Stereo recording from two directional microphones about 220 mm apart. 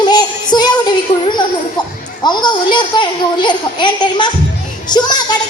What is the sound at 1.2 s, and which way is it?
A child's voice, 20° left (ahead or behind).